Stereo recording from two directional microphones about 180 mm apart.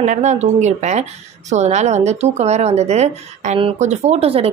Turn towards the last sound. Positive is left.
turn(degrees=-35)  # may be behind; listen again after turning